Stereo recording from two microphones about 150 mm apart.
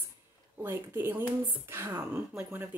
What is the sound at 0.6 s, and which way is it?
Speech, 15° right (ahead or behind).